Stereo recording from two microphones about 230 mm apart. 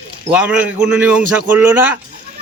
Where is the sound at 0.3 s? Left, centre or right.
Centre.